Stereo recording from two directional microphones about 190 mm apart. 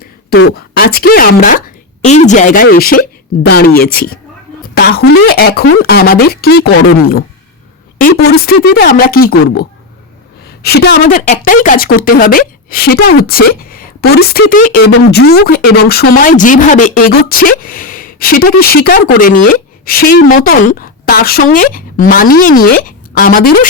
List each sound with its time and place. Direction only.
0.8 s speech: 55° left (ahead or behind)
8.0 s speech: 55° left (ahead or behind)
11.1 s speech: 45° left (ahead or behind)
14.9 s speech: 60° left (ahead or behind)